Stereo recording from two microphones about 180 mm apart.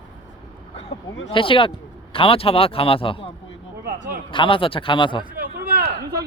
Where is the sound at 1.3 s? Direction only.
30° left (ahead or behind).